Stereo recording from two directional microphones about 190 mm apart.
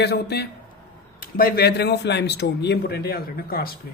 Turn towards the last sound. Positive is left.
turn(degrees=50)  # may be behind; listen again after turning